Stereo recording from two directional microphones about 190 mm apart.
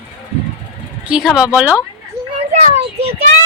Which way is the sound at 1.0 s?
5° right (ahead or behind).